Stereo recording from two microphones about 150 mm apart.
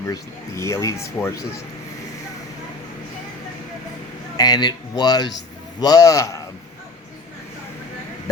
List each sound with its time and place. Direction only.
0.1 s speech: 20° left (ahead or behind)
4.4 s speech: 25° left (ahead or behind)